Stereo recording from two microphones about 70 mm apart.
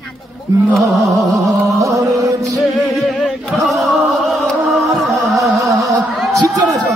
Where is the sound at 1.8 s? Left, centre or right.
Right.